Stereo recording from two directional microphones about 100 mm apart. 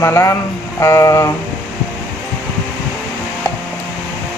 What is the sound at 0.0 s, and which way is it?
Speech, 30° left (ahead or behind).